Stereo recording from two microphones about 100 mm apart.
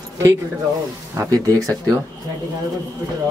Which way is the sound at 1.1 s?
35° right (ahead or behind).